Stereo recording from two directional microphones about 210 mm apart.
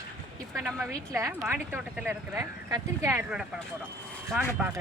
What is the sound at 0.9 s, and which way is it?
Speech, 15° right (ahead or behind).